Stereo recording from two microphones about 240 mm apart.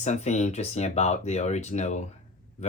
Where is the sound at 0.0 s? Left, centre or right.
Left.